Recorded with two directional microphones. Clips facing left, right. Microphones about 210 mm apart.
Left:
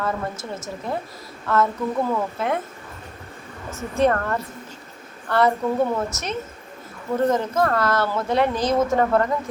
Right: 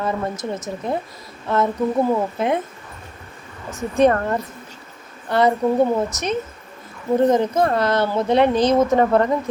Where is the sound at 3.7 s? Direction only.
15° right (ahead or behind).